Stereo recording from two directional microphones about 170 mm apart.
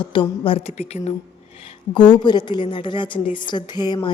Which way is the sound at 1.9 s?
25° left (ahead or behind).